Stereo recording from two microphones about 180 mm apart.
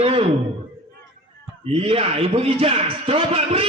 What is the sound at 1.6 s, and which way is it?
Speech, 30° right (ahead or behind).